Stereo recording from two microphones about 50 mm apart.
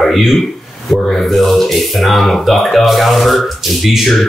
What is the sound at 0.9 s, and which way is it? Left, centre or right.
Speech, centre.